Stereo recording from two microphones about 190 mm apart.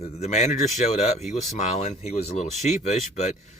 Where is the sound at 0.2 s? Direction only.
35° left (ahead or behind).